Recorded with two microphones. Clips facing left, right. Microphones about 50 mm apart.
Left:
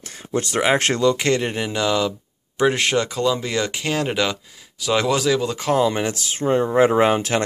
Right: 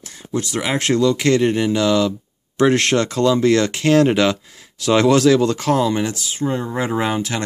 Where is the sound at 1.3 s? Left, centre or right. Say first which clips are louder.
Right 6 dB; centre.